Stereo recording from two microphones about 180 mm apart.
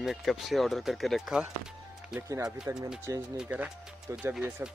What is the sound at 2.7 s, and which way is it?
Speech, 15° right (ahead or behind).